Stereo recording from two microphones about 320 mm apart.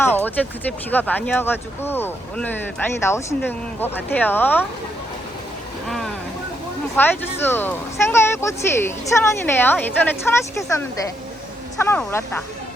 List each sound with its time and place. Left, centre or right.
0.0 s a sound: centre
0.9 s speech: centre
5.9 s speech: centre